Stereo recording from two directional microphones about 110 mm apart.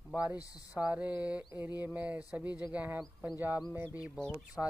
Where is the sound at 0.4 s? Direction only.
30° left (ahead or behind).